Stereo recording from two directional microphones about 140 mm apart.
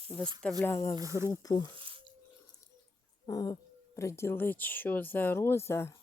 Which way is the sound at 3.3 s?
25° left (ahead or behind).